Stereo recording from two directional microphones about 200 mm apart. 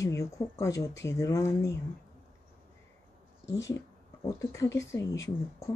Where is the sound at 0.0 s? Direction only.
15° left (ahead or behind).